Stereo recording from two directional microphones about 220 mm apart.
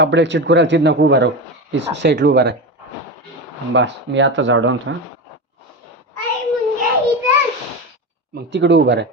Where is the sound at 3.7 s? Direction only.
55° right (ahead or behind).